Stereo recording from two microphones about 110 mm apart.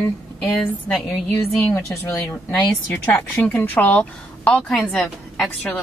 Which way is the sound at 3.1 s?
20° left (ahead or behind).